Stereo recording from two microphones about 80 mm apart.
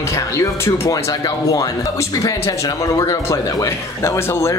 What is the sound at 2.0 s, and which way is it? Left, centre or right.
Speech, left.